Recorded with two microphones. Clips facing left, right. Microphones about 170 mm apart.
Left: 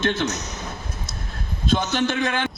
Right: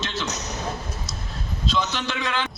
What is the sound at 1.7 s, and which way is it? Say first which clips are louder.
Speech: left 6 dB; 50° left (ahead or behind).